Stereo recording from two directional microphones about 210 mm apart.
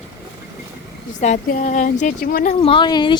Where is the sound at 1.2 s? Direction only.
35° left (ahead or behind).